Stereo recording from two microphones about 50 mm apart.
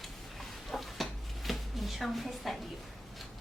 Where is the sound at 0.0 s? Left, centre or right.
Centre.